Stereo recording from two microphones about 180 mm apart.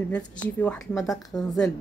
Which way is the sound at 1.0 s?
20° left (ahead or behind).